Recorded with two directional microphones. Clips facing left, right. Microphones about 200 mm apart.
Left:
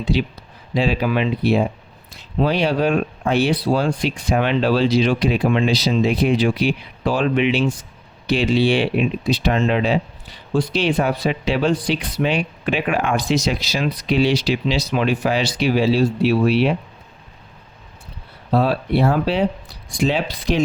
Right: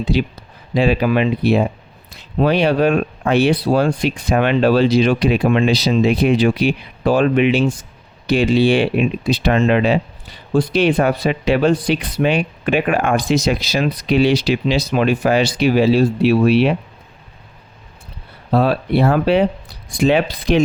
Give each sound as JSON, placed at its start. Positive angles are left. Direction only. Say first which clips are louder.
{"t": 0.1, "sound": "speech", "louder": "right 3 dB", "side_deg": -50}
{"t": 10.5, "sound": "speech", "louder": "right 4 dB", "side_deg": -55}
{"t": 18.5, "sound": "speech", "louder": "right 2 dB", "side_deg": -60}